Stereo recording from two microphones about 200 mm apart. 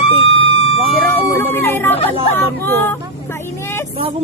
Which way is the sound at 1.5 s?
10° left (ahead or behind).